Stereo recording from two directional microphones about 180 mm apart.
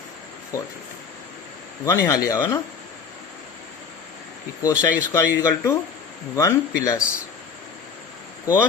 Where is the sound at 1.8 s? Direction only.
15° left (ahead or behind).